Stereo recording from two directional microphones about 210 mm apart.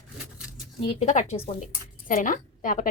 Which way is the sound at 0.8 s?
30° left (ahead or behind).